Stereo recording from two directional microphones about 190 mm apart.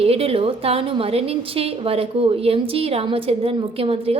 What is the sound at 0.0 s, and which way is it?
A woman's voice, 30° right (ahead or behind).